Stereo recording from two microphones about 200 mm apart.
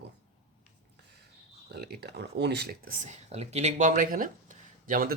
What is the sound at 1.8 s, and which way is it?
Speech, 55° right (ahead or behind).